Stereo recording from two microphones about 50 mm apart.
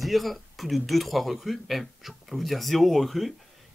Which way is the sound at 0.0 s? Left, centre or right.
Centre.